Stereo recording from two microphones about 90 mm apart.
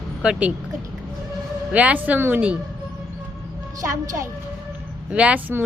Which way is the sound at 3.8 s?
35° right (ahead or behind).